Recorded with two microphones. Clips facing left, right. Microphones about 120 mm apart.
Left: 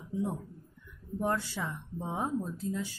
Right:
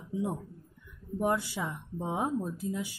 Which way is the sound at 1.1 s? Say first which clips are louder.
Right 2 dB; 15° right (ahead or behind).